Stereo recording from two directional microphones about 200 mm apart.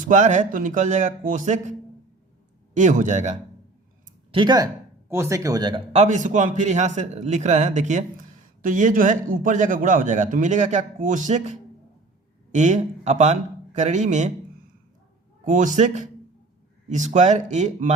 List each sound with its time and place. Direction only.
0.0 s a man's voice: 40° right (ahead or behind)
2.7 s a man's voice: 40° right (ahead or behind)
4.3 s speech: 25° right (ahead or behind)
5.9 s a man's voice: 35° right (ahead or behind)
15.4 s a man's voice: 40° right (ahead or behind)